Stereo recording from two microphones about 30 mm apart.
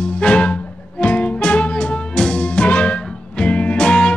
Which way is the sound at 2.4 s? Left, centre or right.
Left.